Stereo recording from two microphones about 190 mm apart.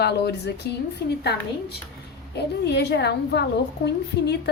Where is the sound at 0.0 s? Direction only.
60° left (ahead or behind).